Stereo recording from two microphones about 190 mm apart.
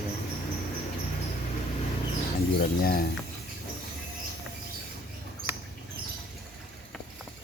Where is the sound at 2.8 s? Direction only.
50° left (ahead or behind).